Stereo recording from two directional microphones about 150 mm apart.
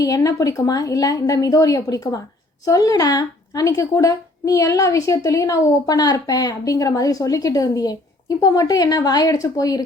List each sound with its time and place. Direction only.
0.0 s a woman's voice: 25° left (ahead or behind)